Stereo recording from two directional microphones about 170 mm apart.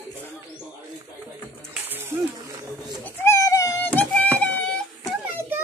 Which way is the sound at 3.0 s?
15° left (ahead or behind).